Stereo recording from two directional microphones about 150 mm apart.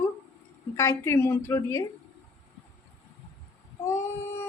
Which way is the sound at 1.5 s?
20° left (ahead or behind).